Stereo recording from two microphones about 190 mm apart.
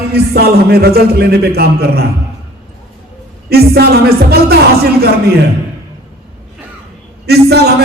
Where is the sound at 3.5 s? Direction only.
55° right (ahead or behind).